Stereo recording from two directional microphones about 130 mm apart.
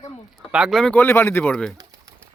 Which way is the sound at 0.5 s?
Centre (ahead or behind).